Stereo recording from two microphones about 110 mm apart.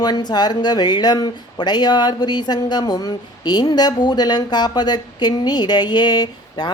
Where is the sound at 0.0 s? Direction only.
40° left (ahead or behind).